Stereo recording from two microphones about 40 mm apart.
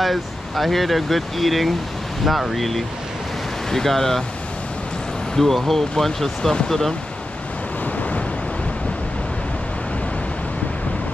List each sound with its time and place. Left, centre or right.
0.0 s speech: centre
5.3 s speech: centre
7.8 s vehicle: left